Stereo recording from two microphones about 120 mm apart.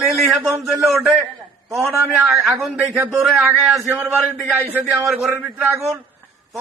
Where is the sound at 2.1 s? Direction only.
Centre (ahead or behind).